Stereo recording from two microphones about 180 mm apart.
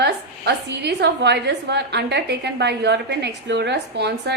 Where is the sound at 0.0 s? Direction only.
65° right (ahead or behind).